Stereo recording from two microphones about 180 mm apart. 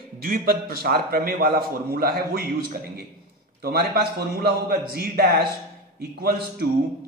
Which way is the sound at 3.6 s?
55° right (ahead or behind).